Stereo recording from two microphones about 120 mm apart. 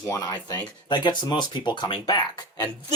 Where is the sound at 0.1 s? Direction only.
35° left (ahead or behind).